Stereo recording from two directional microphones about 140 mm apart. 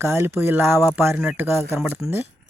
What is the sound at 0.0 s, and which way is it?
Speech, 20° right (ahead or behind).